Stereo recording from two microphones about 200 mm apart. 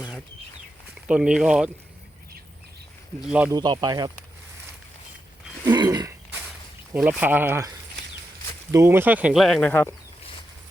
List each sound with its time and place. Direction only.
1.0 s speech: 5° right (ahead or behind)
3.2 s speech: 5° right (ahead or behind)
3.5 s speech: 20° right (ahead or behind)
5.6 s a sound: 20° right (ahead or behind)
6.9 s speech: 5° right (ahead or behind)
8.7 s speech: 10° right (ahead or behind); by 9.9 s 10° left (ahead or behind)